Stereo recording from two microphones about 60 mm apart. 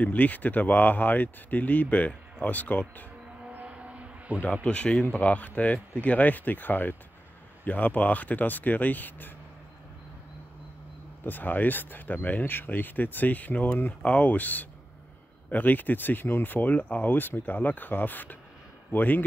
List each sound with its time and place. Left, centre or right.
0.0 s speech: left
3.6 s vehicle: centre
4.4 s speech: left
11.2 s speech: left